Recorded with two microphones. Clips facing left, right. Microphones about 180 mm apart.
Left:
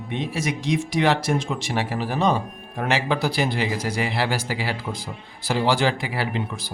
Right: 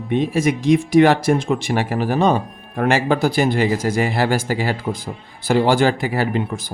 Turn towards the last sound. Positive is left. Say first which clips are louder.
# right 6 dB
turn(degrees=-50)  # may be behind; listen again after turning